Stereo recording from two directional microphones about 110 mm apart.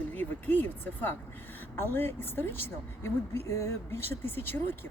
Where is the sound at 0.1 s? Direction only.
15° left (ahead or behind).